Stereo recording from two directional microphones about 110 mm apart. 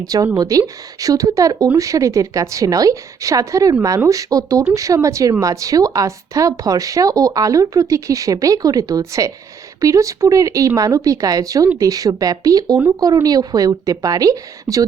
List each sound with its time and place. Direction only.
0.3 s speech: 30° right (ahead or behind)